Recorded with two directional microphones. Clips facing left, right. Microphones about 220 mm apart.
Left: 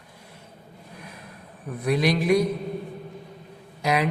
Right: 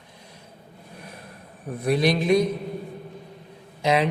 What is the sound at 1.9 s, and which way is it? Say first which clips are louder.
Speech: right 1 dB; 20° right (ahead or behind).